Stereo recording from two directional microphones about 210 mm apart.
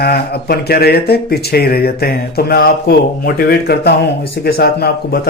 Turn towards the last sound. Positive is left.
turn(degrees=50)  # may be behind; listen again after turning